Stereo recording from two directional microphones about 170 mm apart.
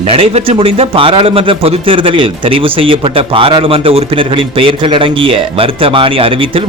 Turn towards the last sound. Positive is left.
turn(degrees=-30)  # may be behind; listen again after turning